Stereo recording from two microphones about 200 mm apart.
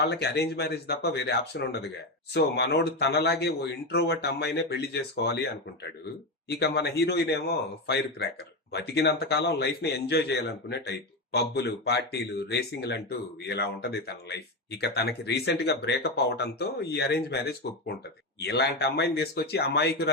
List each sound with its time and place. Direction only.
0.0 s a man's voice: 55° left (ahead or behind)
6.5 s a man's voice: 55° left (ahead or behind)